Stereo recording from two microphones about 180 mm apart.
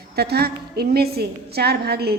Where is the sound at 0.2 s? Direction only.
60° right (ahead or behind).